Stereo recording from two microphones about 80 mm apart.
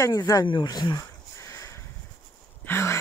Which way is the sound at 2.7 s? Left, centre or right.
Left.